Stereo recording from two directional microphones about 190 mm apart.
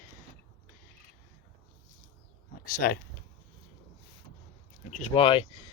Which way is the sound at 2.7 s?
50° left (ahead or behind).